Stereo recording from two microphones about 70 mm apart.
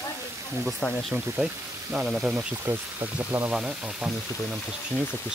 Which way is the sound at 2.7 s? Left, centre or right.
Right.